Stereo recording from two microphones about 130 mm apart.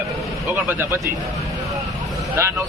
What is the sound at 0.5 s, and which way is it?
Speech, 15° right (ahead or behind).